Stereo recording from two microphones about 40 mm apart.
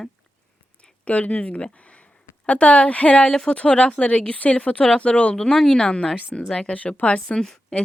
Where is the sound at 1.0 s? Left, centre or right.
Left.